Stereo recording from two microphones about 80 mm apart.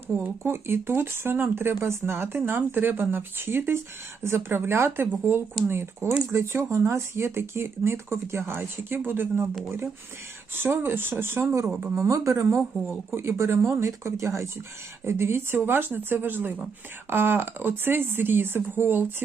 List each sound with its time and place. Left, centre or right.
0.1 s speech: right
10.5 s speech: right
11.9 s speech: right